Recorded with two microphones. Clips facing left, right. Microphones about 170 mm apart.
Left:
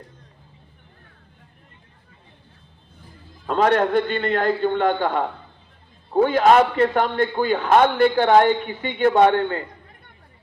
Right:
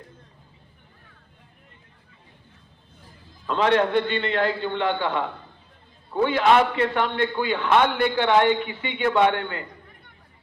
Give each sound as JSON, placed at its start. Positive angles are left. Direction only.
{"t": 3.4, "sound": "a man's voice", "side_deg": 45}